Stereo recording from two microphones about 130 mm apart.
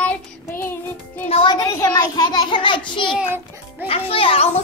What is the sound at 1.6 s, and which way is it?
A child's voice, 25° left (ahead or behind).